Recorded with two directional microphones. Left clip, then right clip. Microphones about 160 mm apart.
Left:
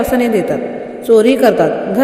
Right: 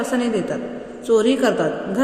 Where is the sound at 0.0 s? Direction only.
40° left (ahead or behind).